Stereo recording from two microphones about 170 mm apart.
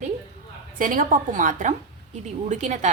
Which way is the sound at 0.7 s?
50° right (ahead or behind).